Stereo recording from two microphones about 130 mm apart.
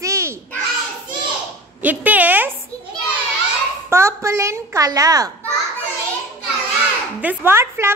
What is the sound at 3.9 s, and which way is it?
A child's voice, 20° right (ahead or behind).